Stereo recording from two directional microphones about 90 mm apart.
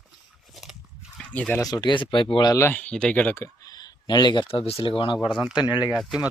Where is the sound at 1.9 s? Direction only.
65° left (ahead or behind).